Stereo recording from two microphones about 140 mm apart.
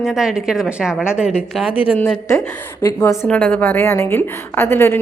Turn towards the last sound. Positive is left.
turn(degrees=15)  # may be behind; listen again after turning